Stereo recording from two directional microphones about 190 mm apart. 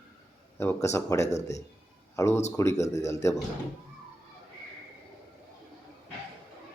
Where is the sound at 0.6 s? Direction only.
15° left (ahead or behind).